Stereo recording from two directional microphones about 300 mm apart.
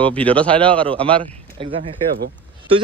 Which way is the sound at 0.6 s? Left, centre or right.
Centre.